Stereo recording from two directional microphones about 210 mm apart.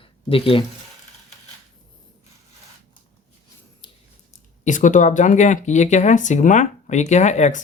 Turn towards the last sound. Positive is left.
turn(degrees=35)  # may be behind; listen again after turning